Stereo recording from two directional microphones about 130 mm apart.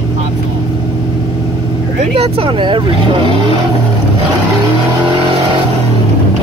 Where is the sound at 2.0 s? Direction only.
50° right (ahead or behind).